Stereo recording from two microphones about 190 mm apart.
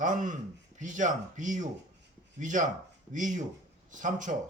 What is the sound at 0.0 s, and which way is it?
Speech, 45° right (ahead or behind).